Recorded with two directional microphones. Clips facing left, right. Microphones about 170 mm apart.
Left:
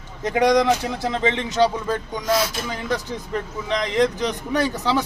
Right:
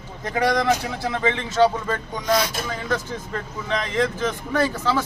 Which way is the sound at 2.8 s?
15° left (ahead or behind).